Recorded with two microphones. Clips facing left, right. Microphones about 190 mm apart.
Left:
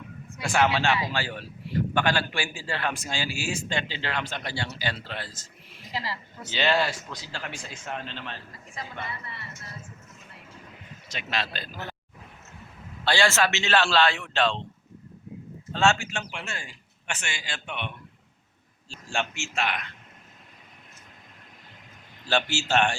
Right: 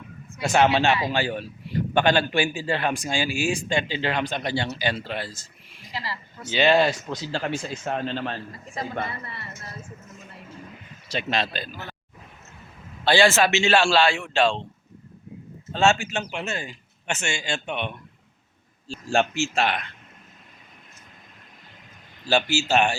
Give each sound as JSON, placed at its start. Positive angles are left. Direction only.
{"t": 0.3, "sound": "a man's voice", "side_deg": -25}
{"t": 11.1, "sound": "a man's voice", "side_deg": -25}
{"t": 13.1, "sound": "a man's voice", "side_deg": -15}
{"t": 15.7, "sound": "a man's voice", "side_deg": -15}
{"t": 18.9, "sound": "speech", "side_deg": -40}
{"t": 22.3, "sound": "a man's voice", "side_deg": -10}